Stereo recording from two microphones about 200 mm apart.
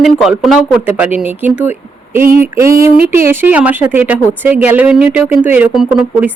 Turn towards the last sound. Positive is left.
turn(degrees=-5)  # may be behind; listen again after turning